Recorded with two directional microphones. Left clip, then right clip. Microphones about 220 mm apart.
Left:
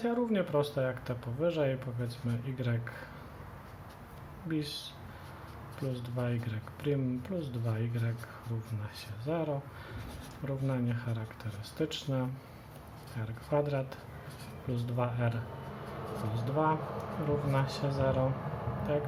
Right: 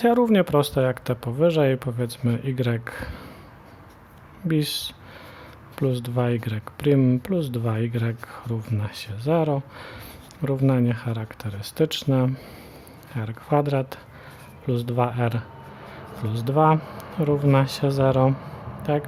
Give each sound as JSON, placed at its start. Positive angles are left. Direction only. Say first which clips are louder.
{"t": 0.0, "sound": "speech", "louder": "right 13 dB", "side_deg": -50}
{"t": 4.4, "sound": "speech", "louder": "right 12 dB", "side_deg": -50}